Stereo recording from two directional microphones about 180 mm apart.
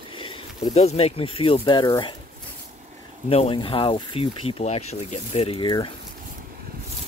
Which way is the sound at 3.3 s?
30° left (ahead or behind).